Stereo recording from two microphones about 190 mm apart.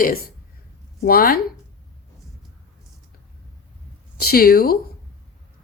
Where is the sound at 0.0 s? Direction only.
50° left (ahead or behind).